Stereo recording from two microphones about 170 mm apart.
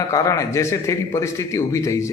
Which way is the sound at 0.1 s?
20° left (ahead or behind).